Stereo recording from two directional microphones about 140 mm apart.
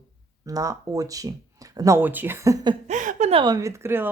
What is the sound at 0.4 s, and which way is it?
Speech, 25° right (ahead or behind).